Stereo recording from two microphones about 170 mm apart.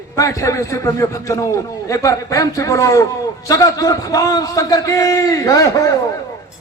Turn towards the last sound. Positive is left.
turn(degrees=20)  # may be behind; listen again after turning